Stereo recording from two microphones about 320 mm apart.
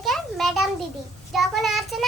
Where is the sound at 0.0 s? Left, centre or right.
Centre.